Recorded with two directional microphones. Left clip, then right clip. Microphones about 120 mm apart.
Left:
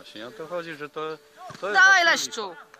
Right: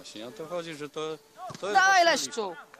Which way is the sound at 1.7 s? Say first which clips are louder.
Left 4 dB; 40° right (ahead or behind).